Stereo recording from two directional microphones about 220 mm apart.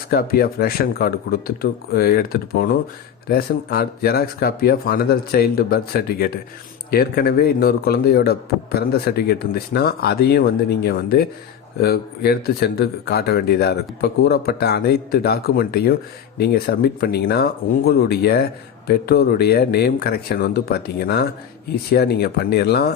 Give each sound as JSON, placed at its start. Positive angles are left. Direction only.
{"t": 0.1, "sound": "speech", "side_deg": 45}